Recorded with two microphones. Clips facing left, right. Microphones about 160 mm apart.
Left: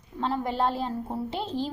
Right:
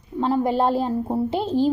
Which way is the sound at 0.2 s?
10° right (ahead or behind).